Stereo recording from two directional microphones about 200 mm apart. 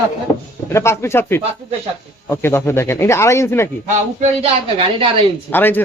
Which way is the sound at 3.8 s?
35° right (ahead or behind).